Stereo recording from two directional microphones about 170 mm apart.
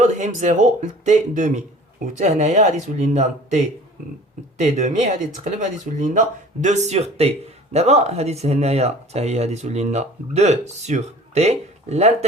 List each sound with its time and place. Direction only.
0.0 s speech: 45° right (ahead or behind)